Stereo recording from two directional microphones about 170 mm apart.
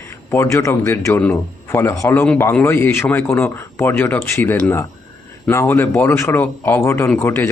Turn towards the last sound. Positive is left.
turn(degrees=10)  # may be behind; listen again after turning